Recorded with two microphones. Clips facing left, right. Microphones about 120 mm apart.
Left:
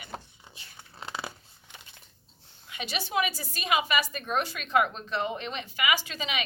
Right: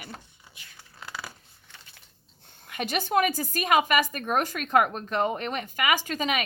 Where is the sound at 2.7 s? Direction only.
50° right (ahead or behind).